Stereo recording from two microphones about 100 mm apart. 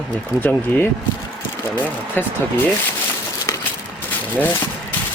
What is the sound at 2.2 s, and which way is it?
Speech, 20° left (ahead or behind).